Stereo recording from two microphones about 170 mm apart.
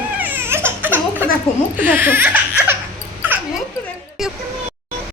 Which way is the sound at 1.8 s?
10° right (ahead or behind).